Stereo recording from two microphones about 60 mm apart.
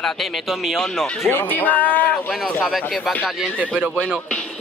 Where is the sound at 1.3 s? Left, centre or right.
Left.